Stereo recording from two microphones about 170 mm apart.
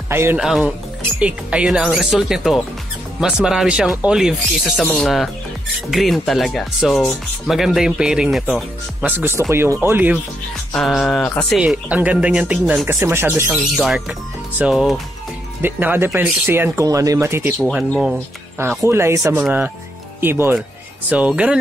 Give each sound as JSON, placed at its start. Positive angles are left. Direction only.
{"t": 0.1, "sound": "speech", "side_deg": -15}
{"t": 0.4, "sound": "speech", "side_deg": -5}
{"t": 9.0, "sound": "speech", "side_deg": -15}
{"t": 10.7, "sound": "speech", "side_deg": 5}
{"t": 17.6, "sound": "speech", "side_deg": 0}